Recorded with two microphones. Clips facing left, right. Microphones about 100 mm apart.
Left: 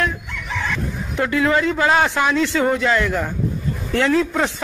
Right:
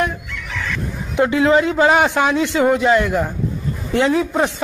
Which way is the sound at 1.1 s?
20° right (ahead or behind).